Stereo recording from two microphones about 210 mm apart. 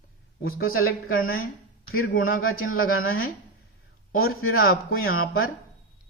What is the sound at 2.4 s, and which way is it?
Speech, 75° left (ahead or behind).